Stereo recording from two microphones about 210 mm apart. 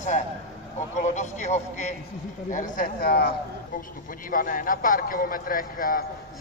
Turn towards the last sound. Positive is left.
turn(degrees=40)  # may be behind; listen again after turning